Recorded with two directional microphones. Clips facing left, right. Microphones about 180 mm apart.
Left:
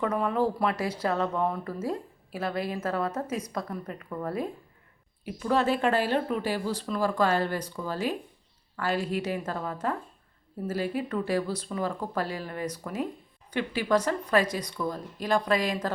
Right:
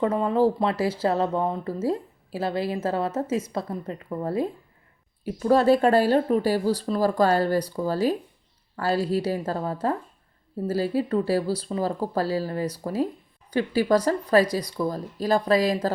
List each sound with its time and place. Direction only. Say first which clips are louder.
0.0 s speech: right 5 dB; 25° right (ahead or behind)
5.2 s speech: right 6 dB; 40° right (ahead or behind)